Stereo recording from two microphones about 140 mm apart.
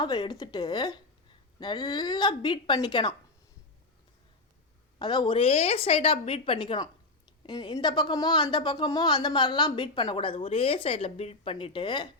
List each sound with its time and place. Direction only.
0.0 s speech: 30° left (ahead or behind)
4.9 s speech: 35° left (ahead or behind)